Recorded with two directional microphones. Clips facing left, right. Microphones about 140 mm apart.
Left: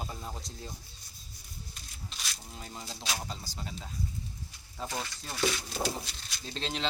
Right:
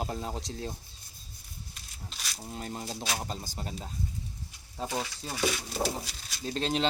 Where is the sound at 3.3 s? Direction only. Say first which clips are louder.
Right 4 dB; 45° right (ahead or behind).